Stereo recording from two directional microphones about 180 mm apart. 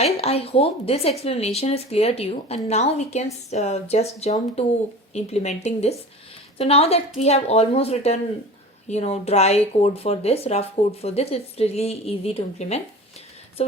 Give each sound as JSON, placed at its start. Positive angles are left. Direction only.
{"t": 0.0, "sound": "speech", "side_deg": 35}